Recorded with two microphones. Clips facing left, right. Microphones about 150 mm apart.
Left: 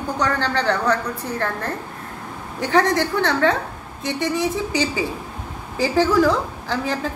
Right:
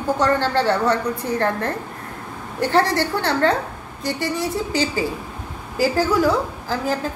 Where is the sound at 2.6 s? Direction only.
20° left (ahead or behind).